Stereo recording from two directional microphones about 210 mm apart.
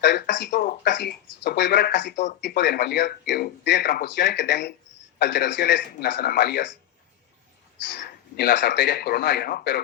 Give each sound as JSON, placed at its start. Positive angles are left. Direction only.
{"t": 0.0, "sound": "speech", "side_deg": 55}
{"t": 7.9, "sound": "speech", "side_deg": 55}